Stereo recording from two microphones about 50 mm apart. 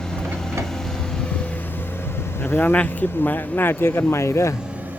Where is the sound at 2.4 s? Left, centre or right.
Left.